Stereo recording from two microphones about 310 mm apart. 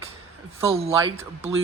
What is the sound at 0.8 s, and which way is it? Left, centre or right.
Speech, centre.